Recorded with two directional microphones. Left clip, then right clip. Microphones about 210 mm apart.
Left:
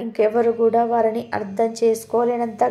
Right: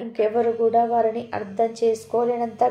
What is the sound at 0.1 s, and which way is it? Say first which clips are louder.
A woman's voice: left 3 dB; 30° left (ahead or behind).